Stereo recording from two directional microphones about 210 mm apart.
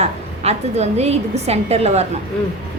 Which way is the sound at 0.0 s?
30° right (ahead or behind).